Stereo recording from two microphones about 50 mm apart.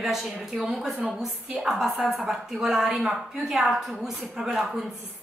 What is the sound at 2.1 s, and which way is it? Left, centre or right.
A woman's voice, centre.